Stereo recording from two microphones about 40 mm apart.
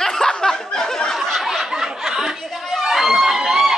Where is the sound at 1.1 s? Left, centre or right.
Centre.